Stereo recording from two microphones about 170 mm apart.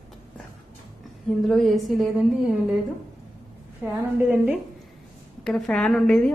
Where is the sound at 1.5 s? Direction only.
Centre (ahead or behind).